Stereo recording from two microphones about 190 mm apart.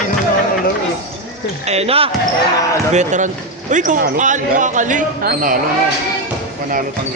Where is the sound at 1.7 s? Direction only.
30° right (ahead or behind).